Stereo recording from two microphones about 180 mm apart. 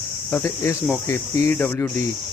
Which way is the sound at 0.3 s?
15° left (ahead or behind).